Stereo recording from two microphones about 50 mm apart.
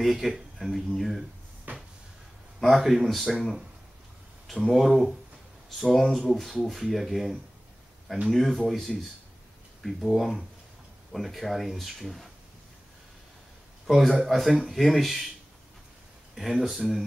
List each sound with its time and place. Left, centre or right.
0.0 s speech: centre
1.7 s drawer open or close: right
2.6 s speech: centre
3.3 s speech: centre
13.8 s speech: centre
16.3 s speech: centre